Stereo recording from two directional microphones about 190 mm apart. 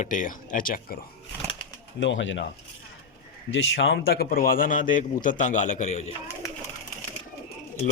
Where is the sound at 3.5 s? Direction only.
75° left (ahead or behind); by 6.1 s 35° left (ahead or behind).